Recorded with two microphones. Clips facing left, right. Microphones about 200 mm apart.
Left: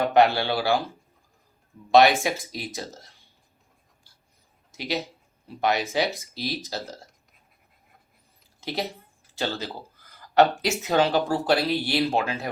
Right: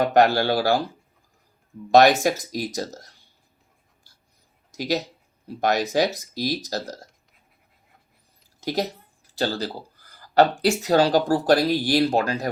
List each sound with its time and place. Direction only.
0.0 s speech: 40° right (ahead or behind)
1.9 s speech: 40° right (ahead or behind)
4.8 s speech: 40° right (ahead or behind)
8.6 s speech: 40° right (ahead or behind)
9.4 s a sound: 35° right (ahead or behind)
10.6 s speech: 35° right (ahead or behind)